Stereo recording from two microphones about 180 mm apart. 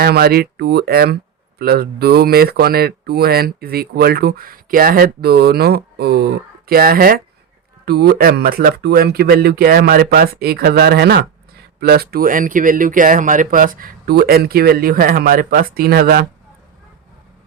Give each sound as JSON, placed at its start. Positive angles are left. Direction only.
{"t": 0.0, "sound": "speech", "side_deg": -60}